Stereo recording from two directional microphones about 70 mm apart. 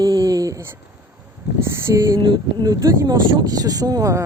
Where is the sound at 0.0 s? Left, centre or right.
Right.